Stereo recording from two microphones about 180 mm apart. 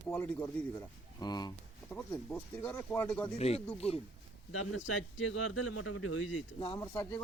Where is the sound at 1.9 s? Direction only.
10° left (ahead or behind).